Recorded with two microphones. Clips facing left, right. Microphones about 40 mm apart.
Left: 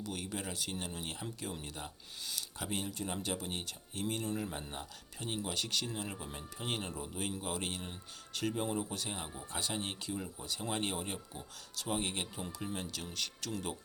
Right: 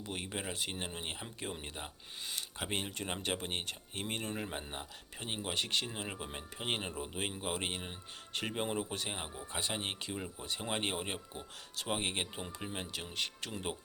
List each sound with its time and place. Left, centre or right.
0.0 s speech: right